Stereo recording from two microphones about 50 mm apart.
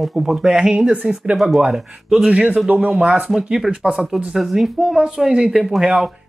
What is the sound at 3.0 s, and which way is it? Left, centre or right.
Speech, centre.